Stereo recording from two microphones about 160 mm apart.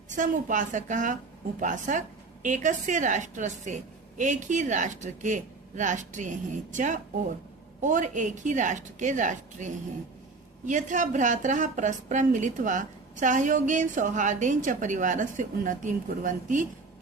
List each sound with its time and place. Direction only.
0.2 s a woman's voice: 55° right (ahead or behind)